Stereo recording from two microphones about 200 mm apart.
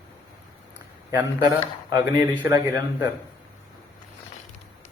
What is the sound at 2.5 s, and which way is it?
Speech, 15° right (ahead or behind).